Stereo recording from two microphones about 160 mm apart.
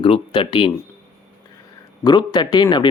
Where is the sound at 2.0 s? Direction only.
25° left (ahead or behind).